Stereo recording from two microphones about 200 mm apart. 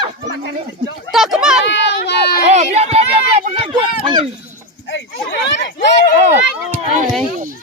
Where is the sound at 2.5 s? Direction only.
35° right (ahead or behind).